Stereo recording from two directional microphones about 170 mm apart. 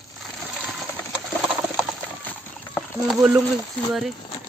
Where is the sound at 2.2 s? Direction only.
5° left (ahead or behind).